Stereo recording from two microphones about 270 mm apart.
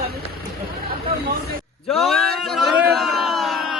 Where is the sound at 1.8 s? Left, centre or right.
Centre.